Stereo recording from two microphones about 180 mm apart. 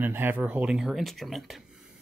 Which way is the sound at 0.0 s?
10° right (ahead or behind).